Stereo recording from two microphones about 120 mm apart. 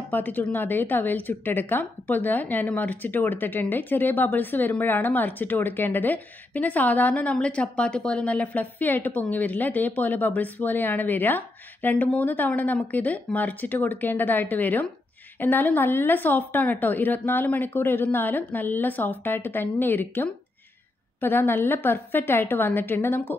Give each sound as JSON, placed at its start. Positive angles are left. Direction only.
{"t": 0.1, "sound": "a woman's voice", "side_deg": 15}